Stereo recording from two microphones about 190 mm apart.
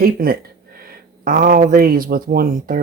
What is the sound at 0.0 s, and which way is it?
Speech, 50° right (ahead or behind).